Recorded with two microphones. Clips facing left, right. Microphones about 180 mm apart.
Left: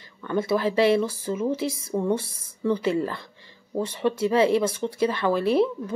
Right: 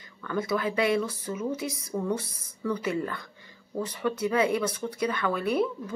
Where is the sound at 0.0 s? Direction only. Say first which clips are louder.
Left 4 dB; 25° left (ahead or behind).